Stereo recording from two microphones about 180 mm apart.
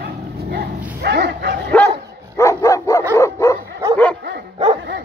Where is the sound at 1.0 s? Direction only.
65° right (ahead or behind).